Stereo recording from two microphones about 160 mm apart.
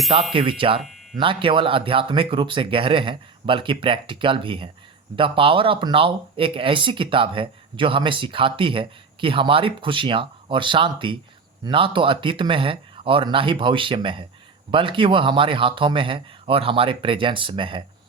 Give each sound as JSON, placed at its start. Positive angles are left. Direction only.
{"t": 0.3, "sound": "speech", "side_deg": -35}